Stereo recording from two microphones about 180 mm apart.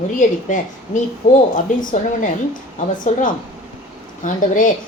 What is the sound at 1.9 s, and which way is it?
A woman's voice, 45° left (ahead or behind).